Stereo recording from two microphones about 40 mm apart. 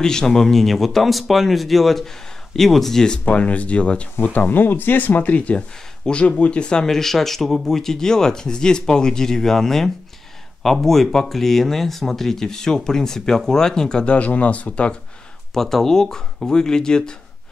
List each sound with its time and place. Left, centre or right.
0.0 s speech: centre
3.3 s speech: left
4.2 s speech: left
6.9 s speech: centre
14.1 s speech: left
15.5 s speech: centre